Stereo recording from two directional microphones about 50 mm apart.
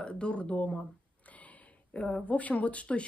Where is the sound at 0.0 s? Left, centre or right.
Left.